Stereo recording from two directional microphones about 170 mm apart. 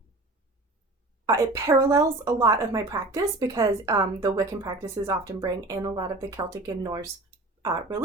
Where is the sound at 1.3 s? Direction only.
15° right (ahead or behind).